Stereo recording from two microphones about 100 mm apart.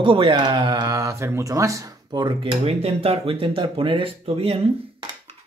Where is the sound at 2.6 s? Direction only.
90° right.